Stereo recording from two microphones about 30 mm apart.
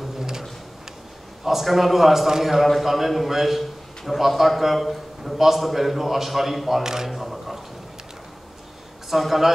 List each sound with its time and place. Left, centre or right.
1.4 s a man's voice: centre
6.8 s speech: centre
7.1 s a sound: centre
9.1 s a man's voice: centre